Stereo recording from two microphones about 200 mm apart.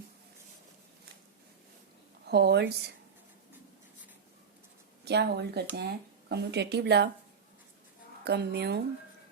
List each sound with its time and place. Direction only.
2.2 s speech: 55° right (ahead or behind)
5.0 s speech: 55° right (ahead or behind)
8.2 s speech: 55° right (ahead or behind)